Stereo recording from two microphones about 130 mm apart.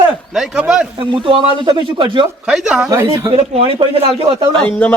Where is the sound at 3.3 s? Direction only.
50° right (ahead or behind).